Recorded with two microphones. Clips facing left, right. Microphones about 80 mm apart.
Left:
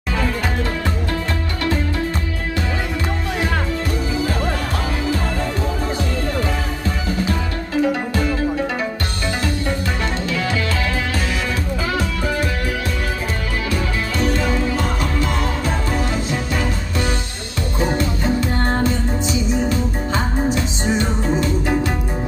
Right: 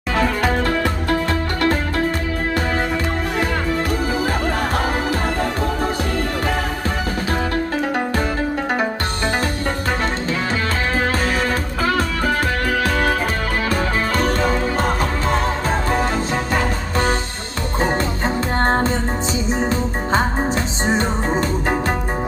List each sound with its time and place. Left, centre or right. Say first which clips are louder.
5.0 s music: right 1 dB; right
14.2 s music: left 2 dB; right